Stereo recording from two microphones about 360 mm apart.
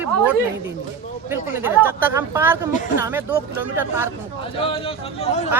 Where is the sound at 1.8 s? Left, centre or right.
Centre.